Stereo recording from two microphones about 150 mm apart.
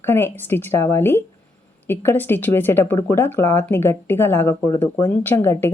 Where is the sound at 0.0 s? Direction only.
15° left (ahead or behind).